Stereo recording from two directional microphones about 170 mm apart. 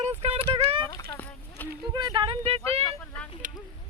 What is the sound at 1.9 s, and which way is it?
Speech, 25° right (ahead or behind).